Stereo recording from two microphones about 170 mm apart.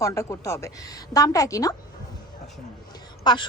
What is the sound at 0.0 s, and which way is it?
A woman's voice, 15° left (ahead or behind).